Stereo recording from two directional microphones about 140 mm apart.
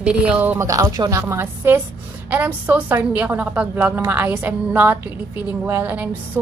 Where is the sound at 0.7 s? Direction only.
25° right (ahead or behind).